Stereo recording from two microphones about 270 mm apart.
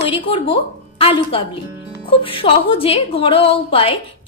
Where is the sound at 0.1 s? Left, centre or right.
Centre.